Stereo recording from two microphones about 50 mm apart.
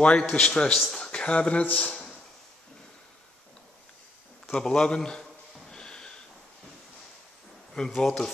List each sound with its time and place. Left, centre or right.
0.0 s a man's voice: centre
4.6 s a man's voice: centre
5.7 s a sound: centre
7.7 s a man's voice: centre